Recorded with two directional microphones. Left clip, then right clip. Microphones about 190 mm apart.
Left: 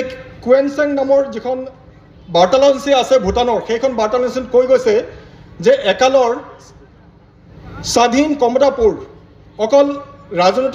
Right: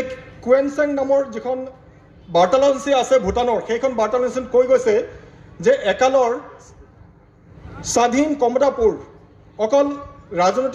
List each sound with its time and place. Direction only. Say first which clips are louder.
0.0 s a man's voice: left 4 dB; 55° left (ahead or behind)
7.7 s a man's voice: left 4 dB; 50° left (ahead or behind)